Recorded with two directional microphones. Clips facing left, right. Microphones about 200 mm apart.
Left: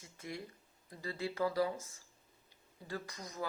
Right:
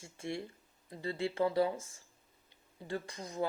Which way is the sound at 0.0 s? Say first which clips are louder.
Right 5 dB; 30° right (ahead or behind).